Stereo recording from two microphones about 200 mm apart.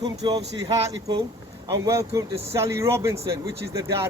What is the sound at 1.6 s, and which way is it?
Speech, 15° right (ahead or behind).